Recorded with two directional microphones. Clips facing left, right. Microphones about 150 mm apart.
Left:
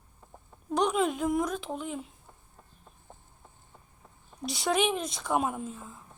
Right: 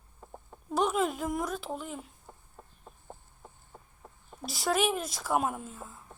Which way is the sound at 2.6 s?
50° right (ahead or behind).